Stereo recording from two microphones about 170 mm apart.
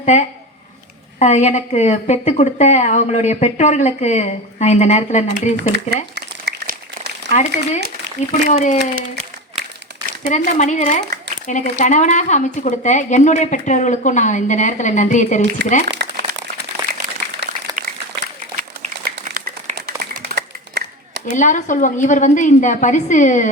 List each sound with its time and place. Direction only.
0.0 s a woman's voice: 45° left (ahead or behind)
5.5 s speech: 75° right (ahead or behind)
6.1 s crumpling: 75° right (ahead or behind)
7.3 s a woman's voice: 40° left (ahead or behind)
9.0 s applause: 40° right (ahead or behind)
10.2 s a woman's voice: 45° left (ahead or behind)
15.9 s crumpling: 80° right
16.9 s a sound: 70° right (ahead or behind)
17.8 s applause: 50° right (ahead or behind)
18.5 s clapping: 50° right (ahead or behind)
21.2 s a woman's voice: 45° left (ahead or behind)